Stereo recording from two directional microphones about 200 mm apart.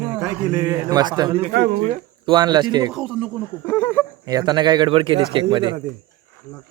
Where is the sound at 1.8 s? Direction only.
25° right (ahead or behind).